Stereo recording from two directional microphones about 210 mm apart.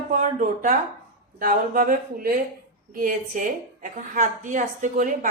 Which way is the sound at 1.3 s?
40° right (ahead or behind).